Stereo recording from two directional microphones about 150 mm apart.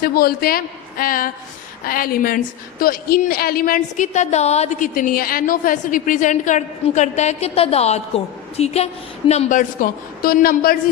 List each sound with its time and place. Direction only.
0.0 s a woman's voice: 90° left